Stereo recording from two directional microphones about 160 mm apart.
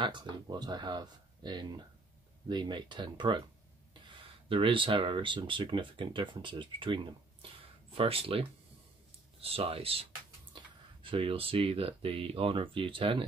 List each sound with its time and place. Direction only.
0.0 s speech: 30° right (ahead or behind)
8.0 s speech: 35° right (ahead or behind)